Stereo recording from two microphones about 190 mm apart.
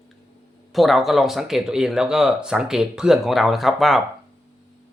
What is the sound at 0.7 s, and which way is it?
Speech, centre (ahead or behind).